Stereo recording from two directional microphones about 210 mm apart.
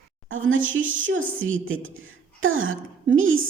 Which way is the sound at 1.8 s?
70° right (ahead or behind).